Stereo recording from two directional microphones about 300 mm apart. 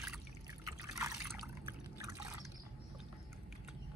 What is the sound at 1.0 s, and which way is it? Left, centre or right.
Water, centre.